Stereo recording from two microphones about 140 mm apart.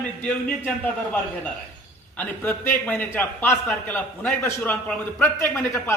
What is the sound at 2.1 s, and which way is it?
A man's voice, 15° left (ahead or behind).